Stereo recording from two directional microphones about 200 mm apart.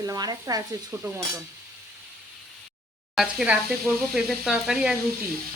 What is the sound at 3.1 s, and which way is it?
Speech, centre (ahead or behind).